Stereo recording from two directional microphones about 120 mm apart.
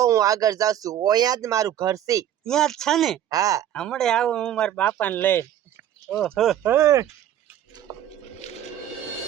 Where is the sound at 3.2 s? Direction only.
30° right (ahead or behind).